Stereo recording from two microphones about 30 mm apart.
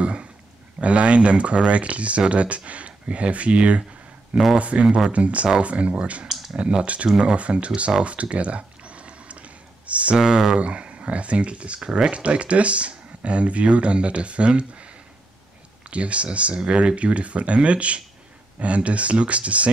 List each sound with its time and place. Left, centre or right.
0.0 s a sound: right
0.7 s speech: right
6.5 s speech: right
7.3 s speech: right
8.0 s a sound: right
10.1 s speech: centre
10.6 s speech: right
11.8 s speech: right
12.1 s speech: right
15.9 s speech: right
16.5 s speech: right